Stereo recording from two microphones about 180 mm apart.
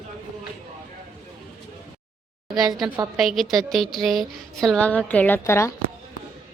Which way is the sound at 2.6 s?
20° right (ahead or behind).